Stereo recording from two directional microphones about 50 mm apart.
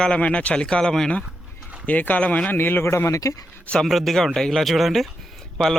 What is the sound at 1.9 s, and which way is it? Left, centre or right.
Speech, left.